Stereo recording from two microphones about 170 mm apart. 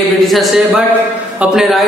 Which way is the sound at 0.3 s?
Centre (ahead or behind).